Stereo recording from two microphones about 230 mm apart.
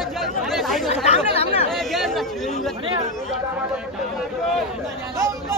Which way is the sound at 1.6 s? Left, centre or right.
Centre.